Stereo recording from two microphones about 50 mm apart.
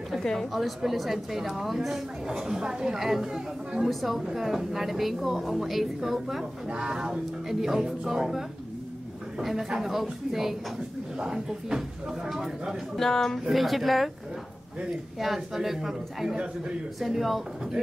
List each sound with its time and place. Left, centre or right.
0.2 s a woman's voice: centre
0.5 s a woman's voice: centre
6.7 s a woman's voice: centre
12.9 s speech: centre
13.5 s a woman's voice: centre
15.1 s a woman's voice: centre